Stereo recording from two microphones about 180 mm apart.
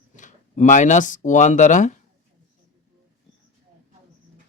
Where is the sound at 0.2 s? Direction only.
45° left (ahead or behind).